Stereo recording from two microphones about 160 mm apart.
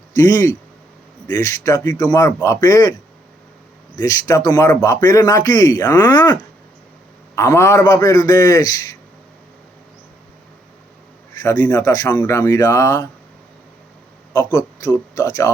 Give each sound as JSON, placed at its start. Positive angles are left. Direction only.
{"t": 0.2, "sound": "speech", "side_deg": 20}
{"t": 3.9, "sound": "speech", "side_deg": 20}
{"t": 11.6, "sound": "speech", "side_deg": 15}
{"t": 14.3, "sound": "speech", "side_deg": 20}